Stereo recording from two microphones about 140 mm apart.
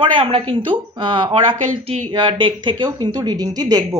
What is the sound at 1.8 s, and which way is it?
Speech, 55° right (ahead or behind).